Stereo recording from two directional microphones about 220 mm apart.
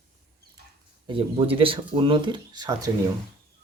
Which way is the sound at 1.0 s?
25° right (ahead or behind).